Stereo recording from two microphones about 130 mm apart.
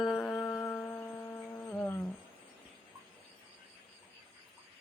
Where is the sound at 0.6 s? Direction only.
15° left (ahead or behind).